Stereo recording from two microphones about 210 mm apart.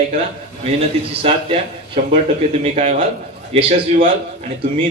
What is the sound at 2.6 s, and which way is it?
A man's voice, 35° right (ahead or behind).